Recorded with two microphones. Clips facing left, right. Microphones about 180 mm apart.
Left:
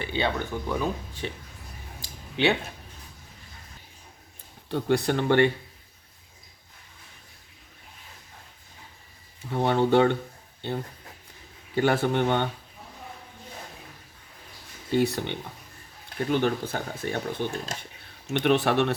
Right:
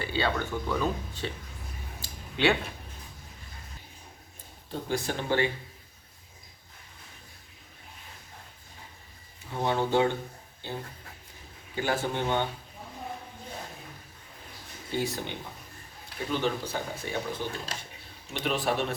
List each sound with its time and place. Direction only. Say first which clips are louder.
0.0 s speech: left 1 dB; 20° left (ahead or behind)
2.0 s a sound: left 2 dB; 20° left (ahead or behind)
4.7 s speech: left 7 dB; 70° left (ahead or behind)
9.6 s speech: left 5 dB; 65° left (ahead or behind)
11.7 s speech: left 6 dB; 70° left (ahead or behind)
14.9 s speech: left 7 dB; 65° left (ahead or behind)
16.3 s speech: left 4 dB; 55° left (ahead or behind)
18.4 s speech: left 6 dB; 70° left (ahead or behind)